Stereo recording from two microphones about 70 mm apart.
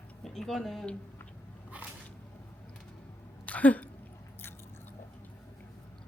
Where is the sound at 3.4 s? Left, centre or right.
Left.